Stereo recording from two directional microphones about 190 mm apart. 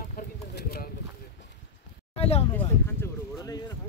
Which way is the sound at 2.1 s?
30° left (ahead or behind).